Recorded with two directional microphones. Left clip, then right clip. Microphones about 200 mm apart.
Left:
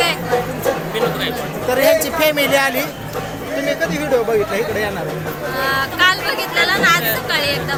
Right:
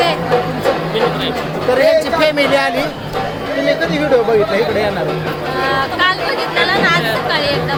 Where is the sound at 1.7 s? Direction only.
25° left (ahead or behind).